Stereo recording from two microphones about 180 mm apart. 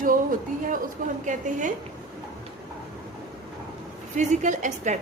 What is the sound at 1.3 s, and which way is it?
Speech, 45° right (ahead or behind).